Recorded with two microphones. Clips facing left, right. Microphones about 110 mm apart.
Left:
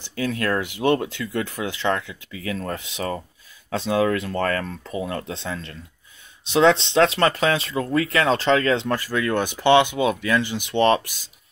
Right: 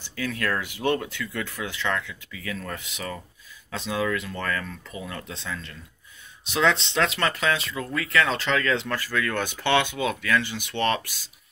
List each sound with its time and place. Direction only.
0.1 s speech: 30° left (ahead or behind)
0.6 s speech: 20° left (ahead or behind)
4.0 s speech: 45° left (ahead or behind); by 11.1 s 25° left (ahead or behind)